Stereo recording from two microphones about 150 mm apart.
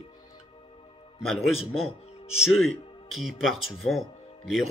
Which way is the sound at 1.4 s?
40° left (ahead or behind).